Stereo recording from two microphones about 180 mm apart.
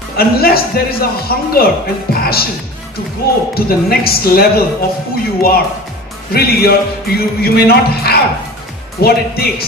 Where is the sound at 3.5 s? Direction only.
55° left (ahead or behind).